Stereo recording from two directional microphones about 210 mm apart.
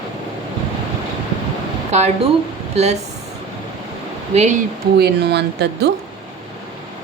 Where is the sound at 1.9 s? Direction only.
30° right (ahead or behind).